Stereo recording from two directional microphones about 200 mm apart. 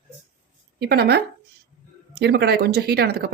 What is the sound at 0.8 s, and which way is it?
Speech, 55° right (ahead or behind).